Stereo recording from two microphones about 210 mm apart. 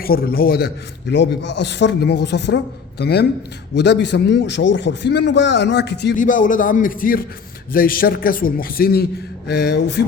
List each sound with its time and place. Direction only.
0.0 s a man's voice: 45° left (ahead or behind)
6.1 s a man's voice: 40° left (ahead or behind)